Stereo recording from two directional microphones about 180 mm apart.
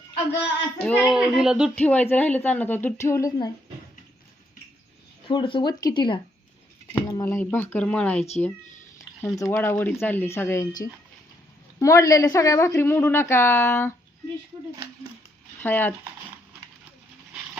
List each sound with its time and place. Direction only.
0.8 s speech: 5° left (ahead or behind)
1.7 s a woman's voice: 10° left (ahead or behind)
5.3 s a woman's voice: 25° left (ahead or behind); by 8.2 s 5° left (ahead or behind)
9.2 s a woman's voice: 15° left (ahead or behind)
15.5 s speech: 10° left (ahead or behind)